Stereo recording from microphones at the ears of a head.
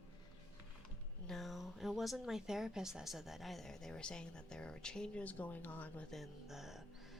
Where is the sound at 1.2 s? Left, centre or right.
Centre.